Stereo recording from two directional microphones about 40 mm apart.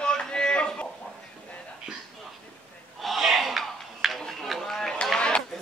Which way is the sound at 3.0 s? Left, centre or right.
Centre.